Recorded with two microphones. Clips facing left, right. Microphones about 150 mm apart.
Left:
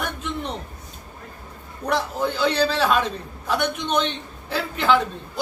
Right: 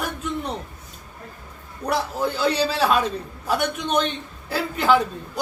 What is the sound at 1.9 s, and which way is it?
Speech, 5° right (ahead or behind).